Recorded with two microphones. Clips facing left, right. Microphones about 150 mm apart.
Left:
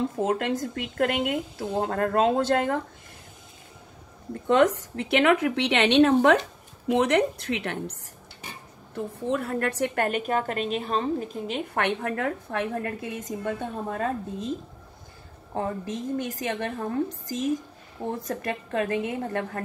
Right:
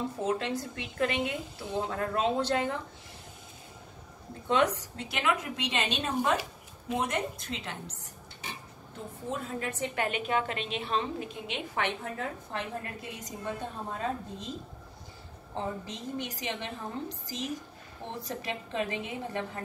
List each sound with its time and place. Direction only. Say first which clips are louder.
0.2 s speech: left 4 dB; 50° left (ahead or behind)
4.3 s a woman's voice: left 6 dB; 50° left (ahead or behind)
8.9 s a woman's voice: left 9 dB; 65° left (ahead or behind)
9.9 s speech: left 4 dB; 45° left (ahead or behind)
11.7 s a woman's voice: left 6 dB; 65° left (ahead or behind)
15.5 s speech: left 6 dB; 50° left (ahead or behind)